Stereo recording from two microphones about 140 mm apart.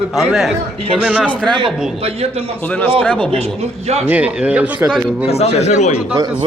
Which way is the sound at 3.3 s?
50° right (ahead or behind).